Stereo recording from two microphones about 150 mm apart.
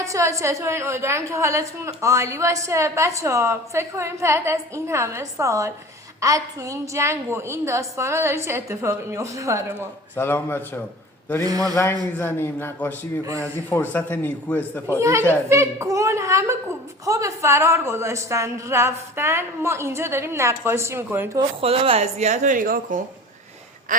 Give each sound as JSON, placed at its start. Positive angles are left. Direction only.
{"t": 0.0, "sound": "a woman's voice", "side_deg": -20}
{"t": 10.2, "sound": "a man's voice", "side_deg": 15}
{"t": 11.4, "sound": "a woman's voice", "side_deg": -25}
{"t": 12.2, "sound": "a man's voice", "side_deg": 15}
{"t": 14.6, "sound": "a woman's voice", "side_deg": -15}
{"t": 21.6, "sound": "speech", "side_deg": -40}
{"t": 23.9, "sound": "a sound", "side_deg": -60}